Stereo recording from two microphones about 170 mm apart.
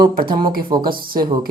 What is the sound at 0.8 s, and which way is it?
Speech, 60° right (ahead or behind).